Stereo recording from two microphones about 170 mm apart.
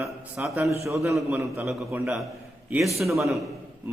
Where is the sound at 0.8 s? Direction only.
20° right (ahead or behind).